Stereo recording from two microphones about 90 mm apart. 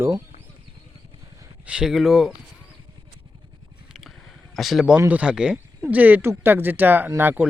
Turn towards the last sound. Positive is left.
turn(degrees=-20)  # may be behind; listen again after turning